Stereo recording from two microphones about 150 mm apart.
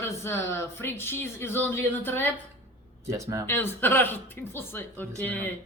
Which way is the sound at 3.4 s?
15° left (ahead or behind).